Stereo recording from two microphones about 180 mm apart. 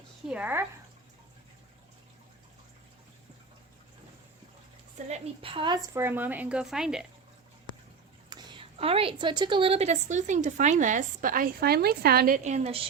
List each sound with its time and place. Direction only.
0.3 s a woman's voice: 10° right (ahead or behind)
5.0 s a woman's voice: 35° right (ahead or behind); by 7.1 s 5° right (ahead or behind)
8.3 s speech: 25° right (ahead or behind); by 12.4 s 55° right (ahead or behind)
12.4 s speech: 40° right (ahead or behind)